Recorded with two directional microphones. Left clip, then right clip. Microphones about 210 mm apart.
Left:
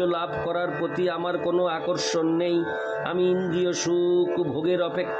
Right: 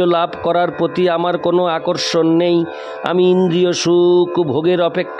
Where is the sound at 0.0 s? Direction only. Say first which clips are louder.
Right 10 dB; 55° right (ahead or behind).